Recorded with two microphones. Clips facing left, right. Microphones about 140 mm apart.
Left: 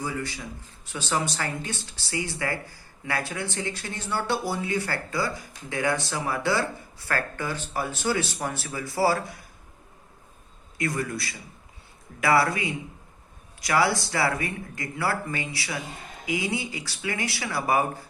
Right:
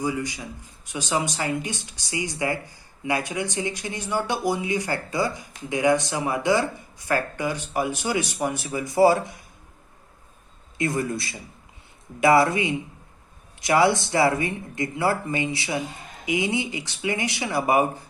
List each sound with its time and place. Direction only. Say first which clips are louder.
0.0 s speech: right 4 dB; 15° right (ahead or behind)
10.8 s speech: right 3 dB; 25° right (ahead or behind)